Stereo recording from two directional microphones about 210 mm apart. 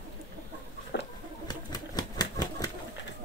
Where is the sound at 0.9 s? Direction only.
55° left (ahead or behind).